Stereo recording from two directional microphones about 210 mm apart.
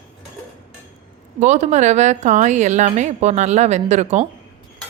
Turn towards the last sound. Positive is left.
turn(degrees=-35)  # may be behind; listen again after turning